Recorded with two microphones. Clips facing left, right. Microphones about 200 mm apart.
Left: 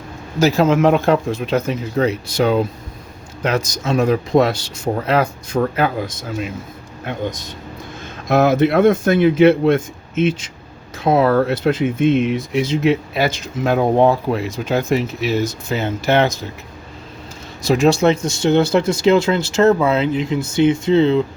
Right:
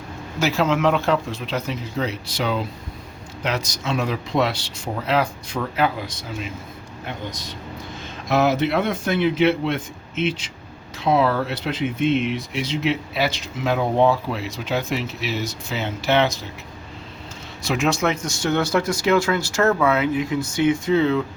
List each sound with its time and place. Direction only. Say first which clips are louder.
0.3 s speech: left 6 dB; 40° left (ahead or behind)
17.6 s speech: left 7 dB; 35° left (ahead or behind)